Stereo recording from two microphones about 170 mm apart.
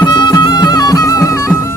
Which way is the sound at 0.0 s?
25° left (ahead or behind).